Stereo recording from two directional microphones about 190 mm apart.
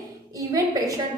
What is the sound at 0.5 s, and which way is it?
Speech, 20° right (ahead or behind).